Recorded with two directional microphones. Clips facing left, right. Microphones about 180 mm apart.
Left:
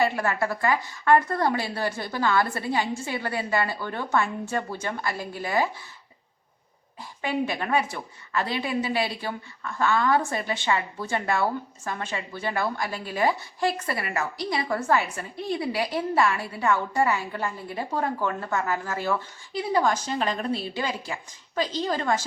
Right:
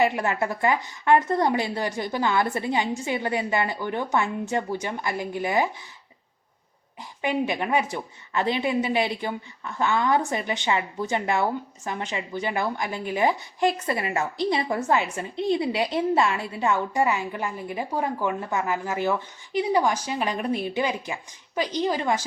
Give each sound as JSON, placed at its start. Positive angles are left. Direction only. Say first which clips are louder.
{"t": 0.0, "sound": "a woman's voice", "louder": "right 1 dB", "side_deg": -20}
{"t": 7.2, "sound": "a woman's voice", "louder": "right 2 dB", "side_deg": -20}